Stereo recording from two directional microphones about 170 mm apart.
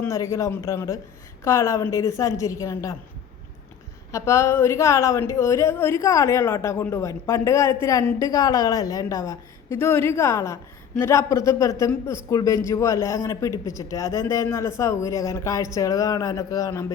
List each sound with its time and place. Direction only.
0.0 s speech: 15° left (ahead or behind)
4.1 s a woman's voice: 15° left (ahead or behind)